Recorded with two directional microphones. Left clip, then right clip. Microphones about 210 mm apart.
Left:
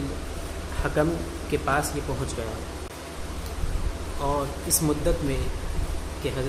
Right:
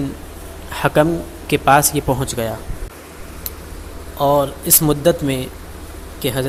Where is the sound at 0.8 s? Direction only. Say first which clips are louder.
Right 10 dB; 45° right (ahead or behind).